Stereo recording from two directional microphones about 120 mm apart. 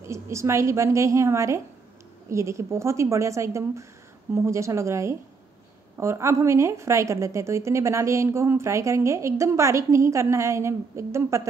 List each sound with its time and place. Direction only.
0.0 s a woman's voice: 25° right (ahead or behind)